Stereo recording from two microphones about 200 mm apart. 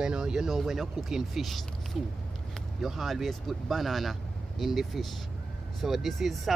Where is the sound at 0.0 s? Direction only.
5° right (ahead or behind).